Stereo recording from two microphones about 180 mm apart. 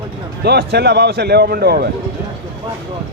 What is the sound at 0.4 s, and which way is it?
A man's voice, 65° right (ahead or behind).